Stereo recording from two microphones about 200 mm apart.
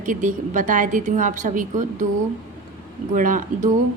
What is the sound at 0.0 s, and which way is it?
A woman's voice, 40° right (ahead or behind).